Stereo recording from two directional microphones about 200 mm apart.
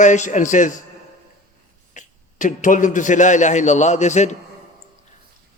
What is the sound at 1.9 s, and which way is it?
A man's voice, 40° left (ahead or behind).